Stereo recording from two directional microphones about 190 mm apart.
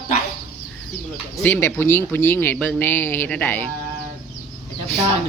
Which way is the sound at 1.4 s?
10° left (ahead or behind).